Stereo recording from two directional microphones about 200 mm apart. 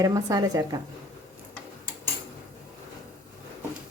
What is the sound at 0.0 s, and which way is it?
Speech, 20° right (ahead or behind).